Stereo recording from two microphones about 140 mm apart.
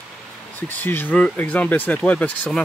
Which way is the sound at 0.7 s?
15° left (ahead or behind).